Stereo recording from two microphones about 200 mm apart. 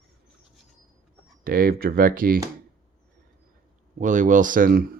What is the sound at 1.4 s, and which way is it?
Speech, 45° right (ahead or behind).